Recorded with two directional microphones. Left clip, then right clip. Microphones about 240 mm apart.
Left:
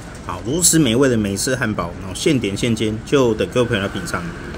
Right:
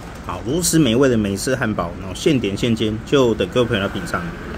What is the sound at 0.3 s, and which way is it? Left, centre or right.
Speech, centre.